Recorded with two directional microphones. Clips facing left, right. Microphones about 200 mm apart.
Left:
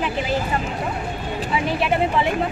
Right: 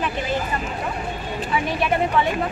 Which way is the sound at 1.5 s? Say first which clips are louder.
Left 1 dB; 25° left (ahead or behind).